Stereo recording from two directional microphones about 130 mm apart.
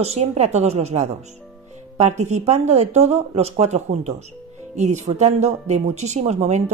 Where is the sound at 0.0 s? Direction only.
55° right (ahead or behind).